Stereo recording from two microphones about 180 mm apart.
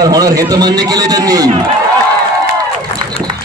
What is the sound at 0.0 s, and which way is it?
A man's voice, 20° right (ahead or behind).